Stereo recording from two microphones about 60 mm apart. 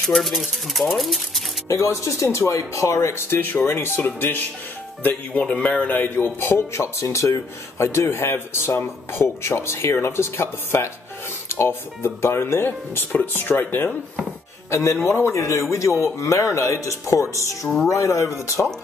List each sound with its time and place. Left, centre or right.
0.1 s speech: centre
1.7 s speech: left
3.3 s speech: left
5.0 s a man's voice: left
14.7 s a man's voice: left